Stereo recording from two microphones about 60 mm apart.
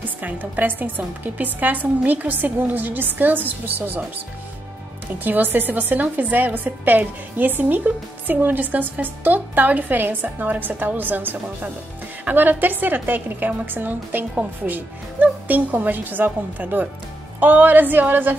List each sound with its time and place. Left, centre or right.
0.2 s a woman's voice: right
5.2 s a woman's voice: right